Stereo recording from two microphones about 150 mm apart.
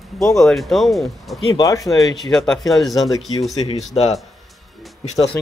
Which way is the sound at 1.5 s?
25° left (ahead or behind).